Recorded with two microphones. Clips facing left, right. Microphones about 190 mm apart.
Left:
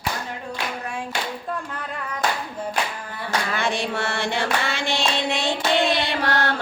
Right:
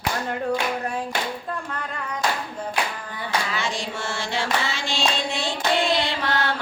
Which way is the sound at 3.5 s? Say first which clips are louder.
Left 4 dB; 60° left (ahead or behind).